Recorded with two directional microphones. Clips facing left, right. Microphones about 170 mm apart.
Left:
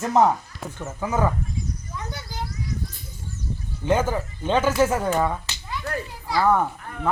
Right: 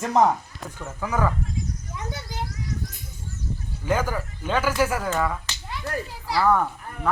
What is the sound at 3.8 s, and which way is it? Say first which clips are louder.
Speech: left 3 dB; 25° left (ahead or behind).